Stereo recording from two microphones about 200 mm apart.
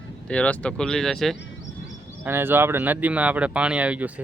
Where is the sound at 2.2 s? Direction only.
10° right (ahead or behind).